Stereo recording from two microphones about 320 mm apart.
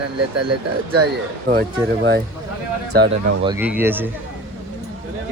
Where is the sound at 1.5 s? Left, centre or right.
Right.